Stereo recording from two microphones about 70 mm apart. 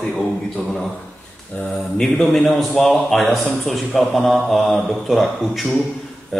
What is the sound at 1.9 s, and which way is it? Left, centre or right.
A man's voice, centre.